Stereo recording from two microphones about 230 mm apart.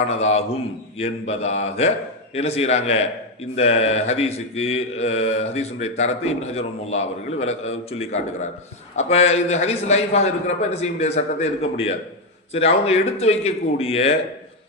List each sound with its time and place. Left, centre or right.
0.1 s mantra: left